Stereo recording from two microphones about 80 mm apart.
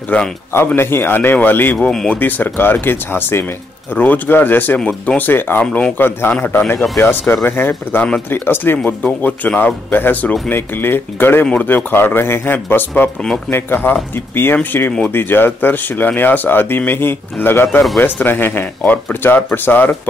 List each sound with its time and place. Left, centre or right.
0.1 s speech: centre
0.7 s speech: left
1.9 s speech: centre
2.1 s speech: left
5.6 s speech: centre
5.9 s speech: left